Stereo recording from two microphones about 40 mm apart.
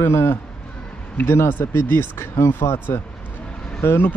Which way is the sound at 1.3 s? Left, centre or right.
Left.